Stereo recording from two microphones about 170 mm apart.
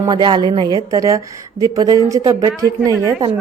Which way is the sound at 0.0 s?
25° right (ahead or behind).